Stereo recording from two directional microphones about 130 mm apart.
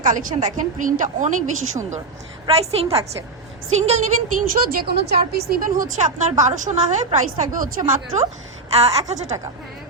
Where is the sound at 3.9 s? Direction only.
65° right (ahead or behind).